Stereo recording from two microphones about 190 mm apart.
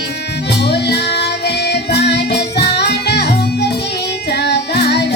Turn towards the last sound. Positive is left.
turn(degrees=60)  # may be behind; listen again after turning